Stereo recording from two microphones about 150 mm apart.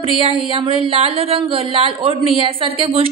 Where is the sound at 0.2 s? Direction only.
35° right (ahead or behind).